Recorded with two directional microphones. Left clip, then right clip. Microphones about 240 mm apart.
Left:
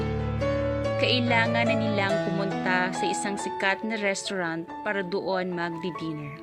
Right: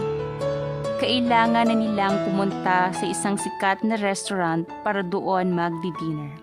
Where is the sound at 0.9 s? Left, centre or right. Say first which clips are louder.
Right 4 dB; right.